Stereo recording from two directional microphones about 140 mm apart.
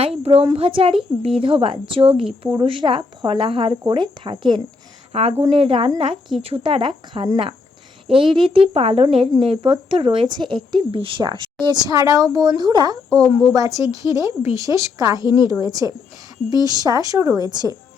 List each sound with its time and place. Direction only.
0.0 s a sound: 40° right (ahead or behind)
0.5 s a woman's voice: 40° right (ahead or behind)
13.1 s speech: 5° left (ahead or behind)
13.5 s a woman's voice: 25° right (ahead or behind)
15.2 s a woman's voice: 35° left (ahead or behind)
15.4 s a woman's voice: 25° right (ahead or behind)